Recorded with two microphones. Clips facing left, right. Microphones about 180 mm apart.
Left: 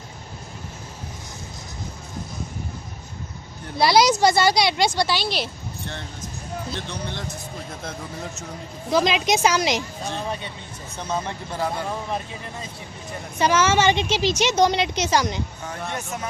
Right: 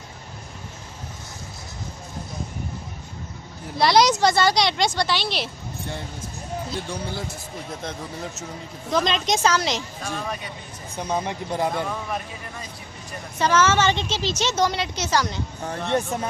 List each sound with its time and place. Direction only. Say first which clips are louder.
3.8 s a woman's voice: left 1 dB; 5° left (ahead or behind)
6.7 s a man's voice: right 2 dB; 5° right (ahead or behind); by 9.8 s 15° left (ahead or behind)
10.2 s speech: left 2 dB; 30° left (ahead or behind)
10.9 s speech: right 2 dB; 10° right (ahead or behind)
13.4 s a woman's voice: left 1 dB; 15° left (ahead or behind)
15.9 s a man's voice: right 9 dB; 30° right (ahead or behind)